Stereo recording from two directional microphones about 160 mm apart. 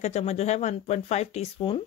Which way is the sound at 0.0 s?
45° left (ahead or behind).